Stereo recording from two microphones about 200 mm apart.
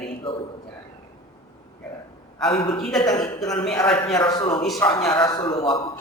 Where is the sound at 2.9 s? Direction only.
20° left (ahead or behind).